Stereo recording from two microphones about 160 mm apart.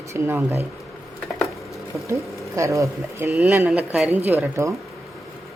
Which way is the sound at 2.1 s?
20° right (ahead or behind).